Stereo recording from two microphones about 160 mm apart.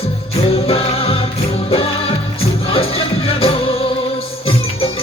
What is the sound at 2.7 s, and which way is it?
Music, 35° left (ahead or behind).